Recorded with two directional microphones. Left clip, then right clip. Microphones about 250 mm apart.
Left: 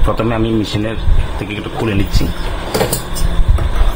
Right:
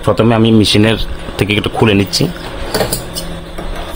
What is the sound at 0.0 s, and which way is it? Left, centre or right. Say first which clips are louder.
Speech: right 5 dB; right.